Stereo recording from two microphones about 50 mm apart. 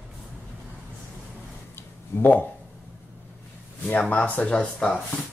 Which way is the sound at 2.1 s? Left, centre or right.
Left.